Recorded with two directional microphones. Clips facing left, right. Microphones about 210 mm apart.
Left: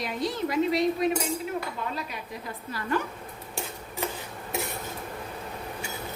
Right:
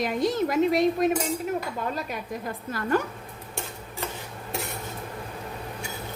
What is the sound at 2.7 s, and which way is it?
Speech, 50° right (ahead or behind).